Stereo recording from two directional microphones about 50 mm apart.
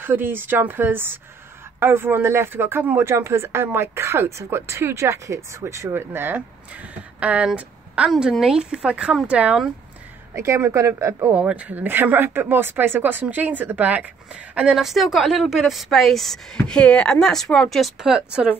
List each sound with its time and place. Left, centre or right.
0.0 s speech: right
3.0 s speech: right
5.9 s speech: right
6.3 s a woman's voice: right
8.2 s a woman's voice: centre
10.3 s a woman's voice: right
11.3 s speech: right; by 16.3 s centre
16.5 s speech: centre
17.9 s a woman's voice: centre